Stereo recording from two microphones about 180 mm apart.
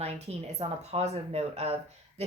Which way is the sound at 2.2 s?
35° right (ahead or behind).